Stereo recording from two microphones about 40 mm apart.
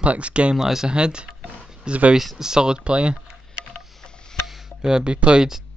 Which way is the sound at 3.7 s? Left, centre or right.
Centre.